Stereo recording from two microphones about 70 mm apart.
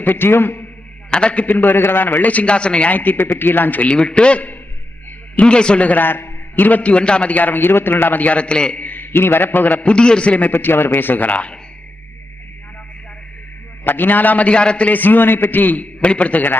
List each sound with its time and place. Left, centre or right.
0.0 s a man's voice: left
1.1 s a man's voice: centre
13.8 s a man's voice: left